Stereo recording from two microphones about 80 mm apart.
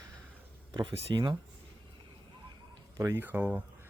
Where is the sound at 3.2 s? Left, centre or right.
Right.